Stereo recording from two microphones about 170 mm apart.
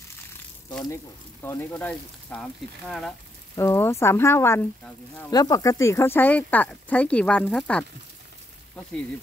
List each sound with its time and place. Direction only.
0.8 s speech: 15° left (ahead or behind); by 3.2 s centre (ahead or behind)
3.5 s speech: 15° left (ahead or behind)